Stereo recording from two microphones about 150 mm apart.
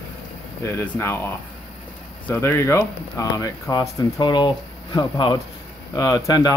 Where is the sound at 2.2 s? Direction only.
15° left (ahead or behind).